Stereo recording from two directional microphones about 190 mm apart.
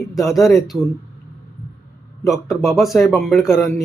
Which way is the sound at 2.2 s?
Centre (ahead or behind).